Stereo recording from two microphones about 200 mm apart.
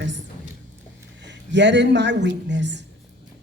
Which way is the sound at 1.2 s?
60° right (ahead or behind).